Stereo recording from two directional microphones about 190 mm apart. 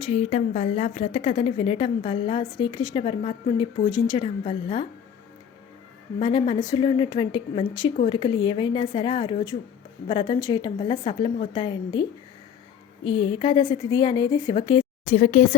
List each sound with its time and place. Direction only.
0.0 s a woman's voice: 35° left (ahead or behind)
6.1 s a woman's voice: 25° left (ahead or behind)
13.1 s a woman's voice: 25° left (ahead or behind)
15.1 s speech: 45° left (ahead or behind)